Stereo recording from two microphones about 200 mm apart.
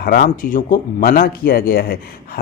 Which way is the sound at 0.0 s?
50° left (ahead or behind).